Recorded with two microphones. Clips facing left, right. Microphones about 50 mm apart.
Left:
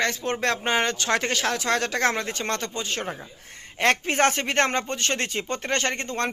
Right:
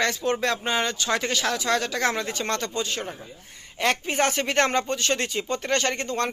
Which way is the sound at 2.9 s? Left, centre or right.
Left.